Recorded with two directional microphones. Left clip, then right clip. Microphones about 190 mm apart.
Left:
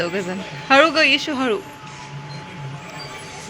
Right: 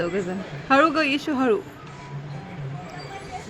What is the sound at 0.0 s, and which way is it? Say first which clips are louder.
A man's voice: left 3 dB; centre (ahead or behind).